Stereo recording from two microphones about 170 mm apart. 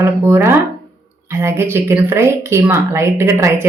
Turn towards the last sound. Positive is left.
turn(degrees=-15)  # may be behind; listen again after turning